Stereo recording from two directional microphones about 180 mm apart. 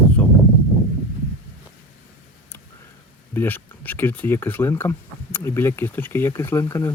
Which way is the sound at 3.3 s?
10° left (ahead or behind).